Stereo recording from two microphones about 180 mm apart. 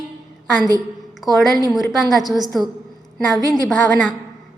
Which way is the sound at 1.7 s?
Centre (ahead or behind).